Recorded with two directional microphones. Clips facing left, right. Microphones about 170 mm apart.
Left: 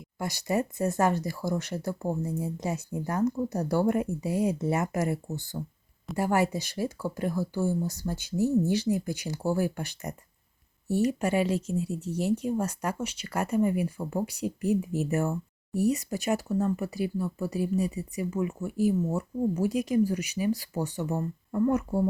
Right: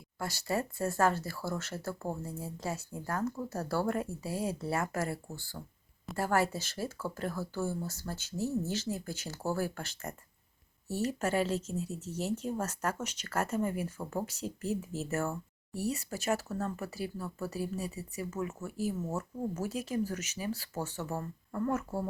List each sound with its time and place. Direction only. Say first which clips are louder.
0.2 s speech: left 5 dB; 15° left (ahead or behind)